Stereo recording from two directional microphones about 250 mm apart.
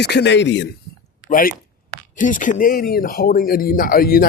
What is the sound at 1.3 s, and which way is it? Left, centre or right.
Speech, left.